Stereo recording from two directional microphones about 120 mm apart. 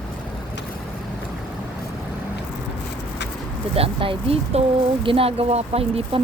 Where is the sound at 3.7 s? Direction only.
50° right (ahead or behind).